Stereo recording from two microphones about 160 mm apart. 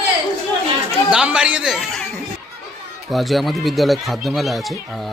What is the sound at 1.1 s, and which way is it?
Speech, 5° right (ahead or behind).